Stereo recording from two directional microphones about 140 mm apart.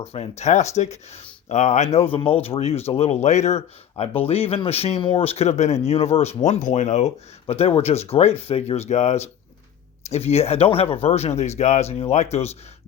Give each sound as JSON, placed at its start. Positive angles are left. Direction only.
{"t": 0.0, "sound": "speech", "side_deg": 50}